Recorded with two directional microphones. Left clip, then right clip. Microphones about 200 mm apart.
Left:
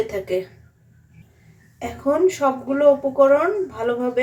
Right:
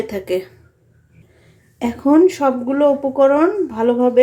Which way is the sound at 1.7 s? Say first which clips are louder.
Right 7 dB; 50° right (ahead or behind).